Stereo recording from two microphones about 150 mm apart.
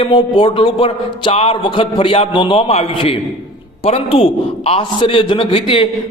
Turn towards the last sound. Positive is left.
turn(degrees=35)  # may be behind; listen again after turning